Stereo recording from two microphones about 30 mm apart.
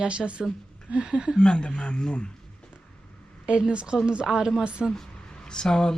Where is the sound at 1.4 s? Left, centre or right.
Left.